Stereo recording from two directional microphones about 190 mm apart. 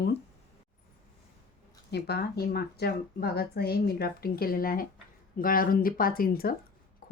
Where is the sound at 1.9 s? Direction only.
60° left (ahead or behind).